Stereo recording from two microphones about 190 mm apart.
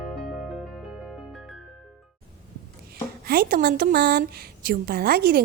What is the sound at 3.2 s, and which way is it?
A woman's voice, 50° right (ahead or behind).